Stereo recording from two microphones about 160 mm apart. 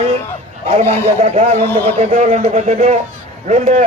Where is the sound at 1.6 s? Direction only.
10° left (ahead or behind).